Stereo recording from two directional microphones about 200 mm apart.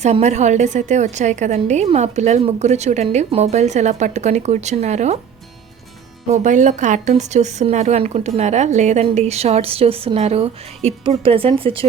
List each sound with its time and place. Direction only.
0.0 s speech: 35° right (ahead or behind)
6.2 s speech: 35° right (ahead or behind)